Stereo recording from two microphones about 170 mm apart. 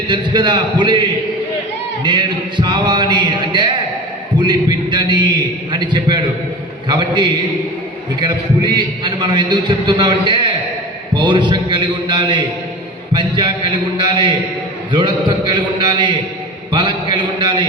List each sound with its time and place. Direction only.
0.1 s a man's voice: 25° right (ahead or behind)
2.0 s a man's voice: 25° right (ahead or behind)